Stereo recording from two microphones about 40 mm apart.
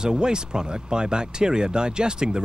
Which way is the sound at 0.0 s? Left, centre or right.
Centre.